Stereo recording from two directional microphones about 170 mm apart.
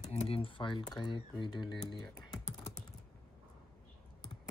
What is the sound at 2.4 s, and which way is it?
Typing, 40° left (ahead or behind).